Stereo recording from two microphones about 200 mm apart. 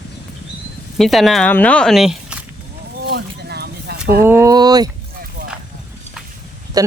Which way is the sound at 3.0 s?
55° right (ahead or behind).